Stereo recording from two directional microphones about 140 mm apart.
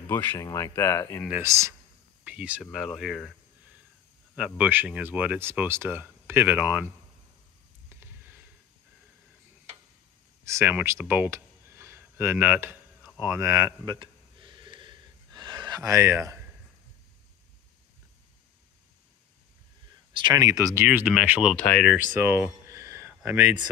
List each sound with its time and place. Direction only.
0.1 s speech: 15° left (ahead or behind)
1.3 s speech: 20° right (ahead or behind)
2.2 s speech: 10° right (ahead or behind)
4.6 s speech: 10° right (ahead or behind)
7.9 s a sound: 15° right (ahead or behind)
10.4 s speech: 20° right (ahead or behind)
13.2 s a sound: 20° right (ahead or behind)
20.1 s speech: 35° right (ahead or behind); by 21.5 s 5° right (ahead or behind)
21.6 s speech: 5° left (ahead or behind)
21.9 s a sound: 15° right (ahead or behind)
23.2 s speech: 15° right (ahead or behind)